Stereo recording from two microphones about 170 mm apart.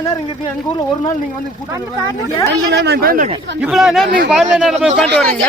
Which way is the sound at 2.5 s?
85° right.